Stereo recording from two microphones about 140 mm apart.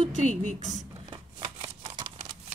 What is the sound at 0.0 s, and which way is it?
Speech, 55° right (ahead or behind).